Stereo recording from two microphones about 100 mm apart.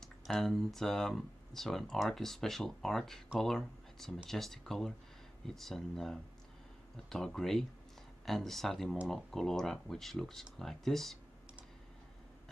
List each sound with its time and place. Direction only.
0.0 s speech: centre (ahead or behind)